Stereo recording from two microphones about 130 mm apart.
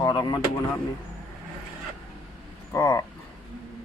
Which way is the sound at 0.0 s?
30° left (ahead or behind).